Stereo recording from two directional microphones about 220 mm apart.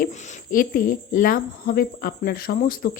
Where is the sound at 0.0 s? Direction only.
35° left (ahead or behind).